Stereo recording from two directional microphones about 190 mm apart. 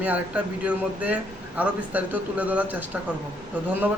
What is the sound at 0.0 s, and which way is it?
A man's voice, 10° right (ahead or behind).